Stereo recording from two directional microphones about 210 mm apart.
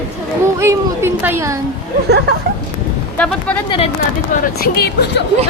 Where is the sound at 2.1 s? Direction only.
50° right (ahead or behind).